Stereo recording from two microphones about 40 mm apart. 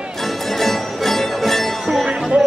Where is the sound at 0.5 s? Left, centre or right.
Centre.